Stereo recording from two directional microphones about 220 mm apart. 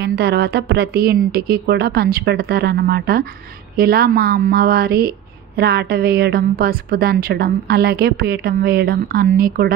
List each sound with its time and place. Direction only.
0.0 s a woman's voice: 45° right (ahead or behind)